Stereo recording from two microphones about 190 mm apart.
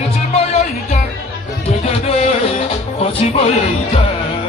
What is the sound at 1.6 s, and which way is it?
Music, 35° left (ahead or behind).